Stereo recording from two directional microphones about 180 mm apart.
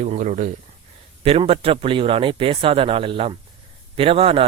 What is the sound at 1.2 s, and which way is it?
A man's voice, 30° right (ahead or behind).